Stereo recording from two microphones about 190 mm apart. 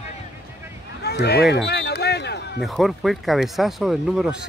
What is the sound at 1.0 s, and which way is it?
Speech, 60° left (ahead or behind).